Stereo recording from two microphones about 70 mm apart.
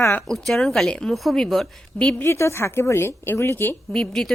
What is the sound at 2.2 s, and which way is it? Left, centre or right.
A woman's voice, left.